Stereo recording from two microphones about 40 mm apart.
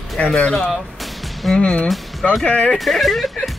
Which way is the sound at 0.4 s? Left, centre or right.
Left.